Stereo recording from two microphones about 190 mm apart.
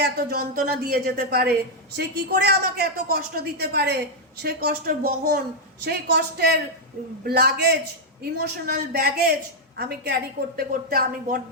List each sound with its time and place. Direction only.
0.0 s a woman's voice: 55° right (ahead or behind)